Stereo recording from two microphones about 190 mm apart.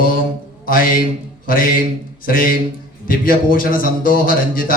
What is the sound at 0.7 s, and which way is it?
Speech, 50° left (ahead or behind).